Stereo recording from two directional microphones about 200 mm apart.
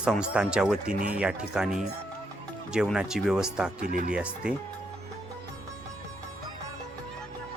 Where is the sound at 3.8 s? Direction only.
45° right (ahead or behind).